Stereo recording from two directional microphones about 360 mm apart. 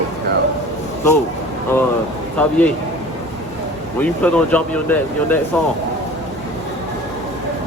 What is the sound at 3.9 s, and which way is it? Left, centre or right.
Speech, centre.